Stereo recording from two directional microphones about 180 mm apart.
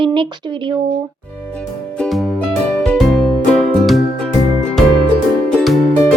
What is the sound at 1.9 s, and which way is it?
Music, centre (ahead or behind).